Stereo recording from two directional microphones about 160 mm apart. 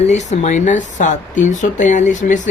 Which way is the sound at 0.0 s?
45° left (ahead or behind).